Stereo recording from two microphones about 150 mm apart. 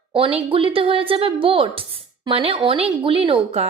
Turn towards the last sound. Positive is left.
turn(degrees=-40)  # may be behind; listen again after turning